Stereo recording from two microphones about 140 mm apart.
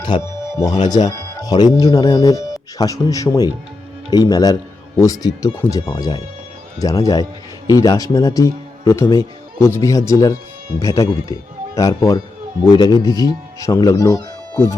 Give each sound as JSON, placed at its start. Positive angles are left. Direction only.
{"t": 0.2, "sound": "speech", "side_deg": 25}